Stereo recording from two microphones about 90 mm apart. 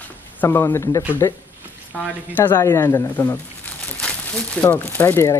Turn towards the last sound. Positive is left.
turn(degrees=25)  # may be behind; listen again after turning